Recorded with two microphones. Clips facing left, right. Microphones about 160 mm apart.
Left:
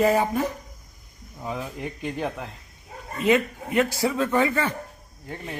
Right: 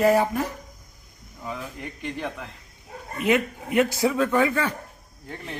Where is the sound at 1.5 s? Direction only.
10° left (ahead or behind).